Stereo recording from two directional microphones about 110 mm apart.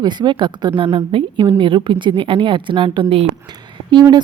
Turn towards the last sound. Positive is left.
turn(degrees=-40)  # may be behind; listen again after turning